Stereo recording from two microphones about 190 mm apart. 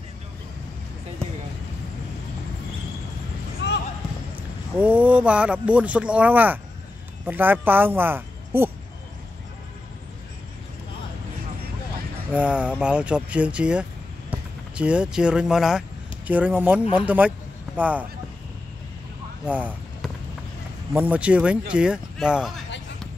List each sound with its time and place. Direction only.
3.6 s basketball bounce: 70° left (ahead or behind)
4.7 s speech: 10° right (ahead or behind)
12.3 s speech: 5° right (ahead or behind)
19.4 s speech: 5° right (ahead or behind)